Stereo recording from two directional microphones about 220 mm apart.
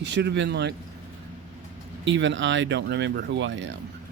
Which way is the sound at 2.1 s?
55° right (ahead or behind).